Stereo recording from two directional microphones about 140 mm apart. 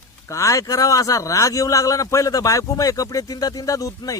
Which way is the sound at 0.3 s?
20° left (ahead or behind).